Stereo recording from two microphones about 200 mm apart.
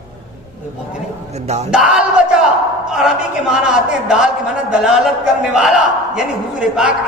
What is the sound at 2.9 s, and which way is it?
A man's voice, 5° right (ahead or behind).